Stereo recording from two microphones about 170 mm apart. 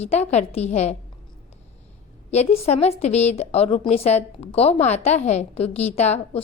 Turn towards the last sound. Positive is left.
turn(degrees=40)  # may be behind; listen again after turning